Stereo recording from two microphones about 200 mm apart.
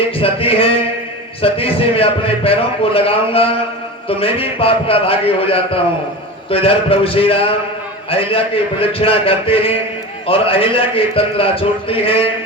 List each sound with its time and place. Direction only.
0.2 s a man's voice: 30° left (ahead or behind)